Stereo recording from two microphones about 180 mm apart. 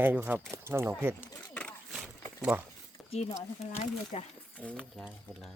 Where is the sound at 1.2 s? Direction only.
5° left (ahead or behind).